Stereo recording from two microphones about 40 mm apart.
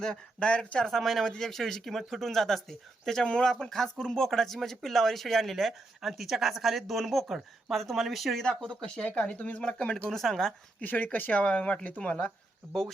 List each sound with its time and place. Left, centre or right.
0.3 s speech: left
0.9 s speech: centre
9.1 s speech: left; by 10.5 s centre
10.8 s speech: left
11.3 s speech: left